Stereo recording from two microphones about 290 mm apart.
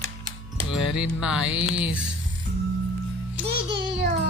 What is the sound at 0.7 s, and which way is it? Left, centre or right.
Speech, centre.